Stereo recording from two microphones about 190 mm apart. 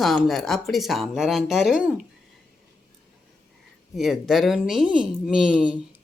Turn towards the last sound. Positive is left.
turn(degrees=-5)  # may be behind; listen again after turning